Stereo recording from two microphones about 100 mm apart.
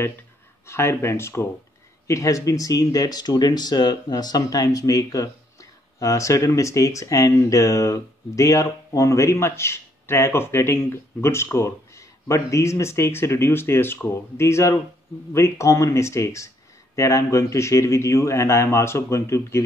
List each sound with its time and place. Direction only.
0.7 s speech: 25° left (ahead or behind)